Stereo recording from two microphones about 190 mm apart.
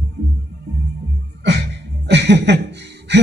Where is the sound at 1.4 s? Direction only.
65° right (ahead or behind).